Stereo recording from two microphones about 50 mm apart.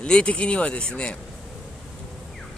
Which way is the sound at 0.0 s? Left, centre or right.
Left.